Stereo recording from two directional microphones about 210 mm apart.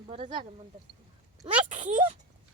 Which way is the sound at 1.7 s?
35° right (ahead or behind).